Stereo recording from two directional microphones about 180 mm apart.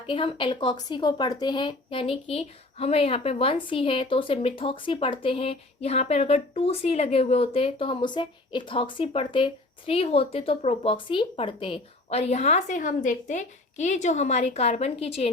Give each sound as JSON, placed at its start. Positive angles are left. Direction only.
{"t": 0.1, "sound": "speech", "side_deg": 30}